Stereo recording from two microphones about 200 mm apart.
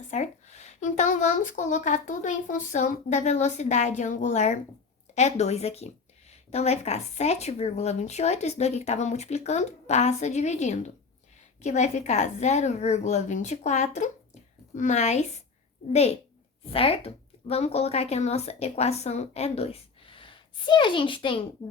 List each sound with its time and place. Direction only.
0.1 s speech: 35° left (ahead or behind)